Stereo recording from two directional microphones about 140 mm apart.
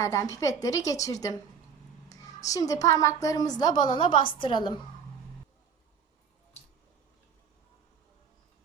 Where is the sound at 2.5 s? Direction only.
25° left (ahead or behind).